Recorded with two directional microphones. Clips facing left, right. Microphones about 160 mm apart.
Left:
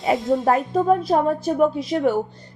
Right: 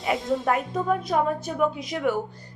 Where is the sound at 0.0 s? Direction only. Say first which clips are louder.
Left 5 dB; 30° left (ahead or behind).